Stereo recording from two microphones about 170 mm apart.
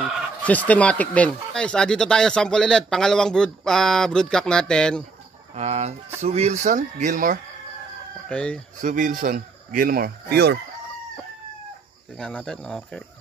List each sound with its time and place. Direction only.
0.4 s speech: 10° left (ahead or behind)
5.5 s speech: 40° right (ahead or behind)
8.3 s speech: 5° left (ahead or behind)
8.8 s speech: 50° right (ahead or behind); by 10.6 s 75° right (ahead or behind)
12.2 s speech: 5° left (ahead or behind)